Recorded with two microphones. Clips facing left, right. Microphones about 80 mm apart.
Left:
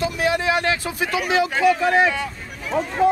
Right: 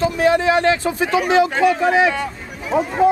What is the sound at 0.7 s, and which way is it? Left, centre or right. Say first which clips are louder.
Speech: right 5 dB; centre.